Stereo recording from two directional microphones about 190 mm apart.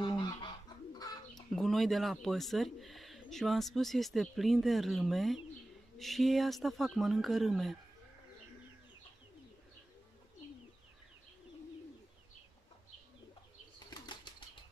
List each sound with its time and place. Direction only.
0.0 s goose: 25° left (ahead or behind)
0.9 s bird: 20° left (ahead or behind)
1.3 s speech: centre (ahead or behind)
13.8 s bird flight: 25° left (ahead or behind)